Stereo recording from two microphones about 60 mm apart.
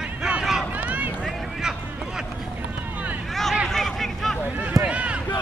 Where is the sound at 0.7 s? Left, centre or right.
Right.